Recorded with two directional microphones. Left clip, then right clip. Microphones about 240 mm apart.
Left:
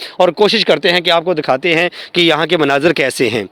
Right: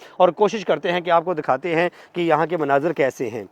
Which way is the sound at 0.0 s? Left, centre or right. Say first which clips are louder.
Left 5 dB; left.